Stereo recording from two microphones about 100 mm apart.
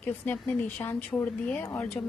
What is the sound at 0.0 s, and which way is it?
A woman's voice, 15° left (ahead or behind).